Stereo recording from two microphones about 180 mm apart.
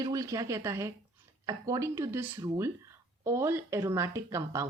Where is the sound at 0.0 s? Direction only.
20° right (ahead or behind).